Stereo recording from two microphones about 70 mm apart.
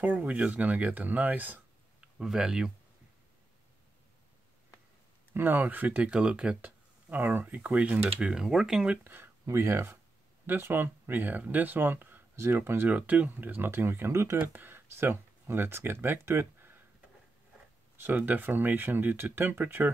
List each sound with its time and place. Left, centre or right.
0.0 s speech: right
2.0 s speech: centre
5.3 s speech: right; by 8.8 s centre
8.8 s speech: centre
9.1 s speech: right
12.9 s speech: right
14.4 s speech: right
17.9 s speech: right